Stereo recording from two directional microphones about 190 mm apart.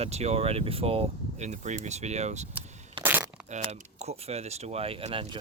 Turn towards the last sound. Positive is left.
turn(degrees=-30)  # may be behind; listen again after turning